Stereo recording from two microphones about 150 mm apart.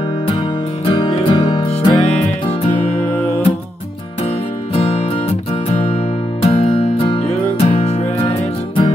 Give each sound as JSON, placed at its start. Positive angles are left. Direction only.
{"t": 0.8, "sound": "music", "side_deg": 35}
{"t": 3.0, "sound": "music", "side_deg": 15}
{"t": 5.5, "sound": "music", "side_deg": 45}